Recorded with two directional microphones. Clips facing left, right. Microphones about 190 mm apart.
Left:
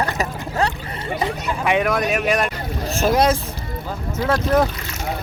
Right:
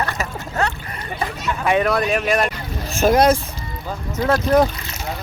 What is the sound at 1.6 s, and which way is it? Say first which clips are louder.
A man's voice: right 1 dB; 10° left (ahead or behind).